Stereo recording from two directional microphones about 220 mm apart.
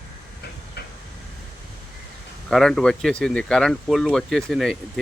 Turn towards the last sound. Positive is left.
turn(degrees=0)  # may be behind; listen again after turning